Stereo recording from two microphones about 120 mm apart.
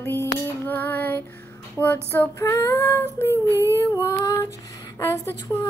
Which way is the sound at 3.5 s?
20° right (ahead or behind).